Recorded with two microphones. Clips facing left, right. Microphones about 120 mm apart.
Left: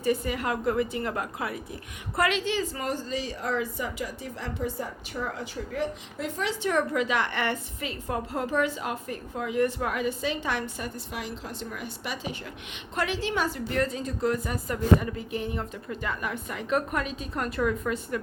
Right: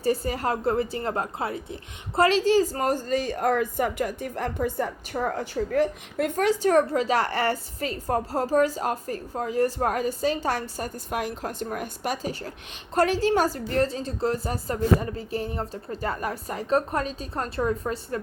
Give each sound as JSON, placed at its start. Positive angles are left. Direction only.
{"t": 0.0, "sound": "a woman's voice", "side_deg": -35}